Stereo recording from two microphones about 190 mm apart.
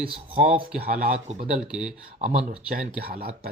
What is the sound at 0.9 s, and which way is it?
Speech, 50° right (ahead or behind).